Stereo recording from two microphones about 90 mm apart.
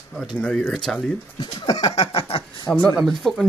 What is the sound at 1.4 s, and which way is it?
Speech, 50° left (ahead or behind).